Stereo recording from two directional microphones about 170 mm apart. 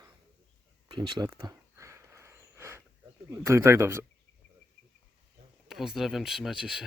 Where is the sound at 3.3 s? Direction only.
15° right (ahead or behind).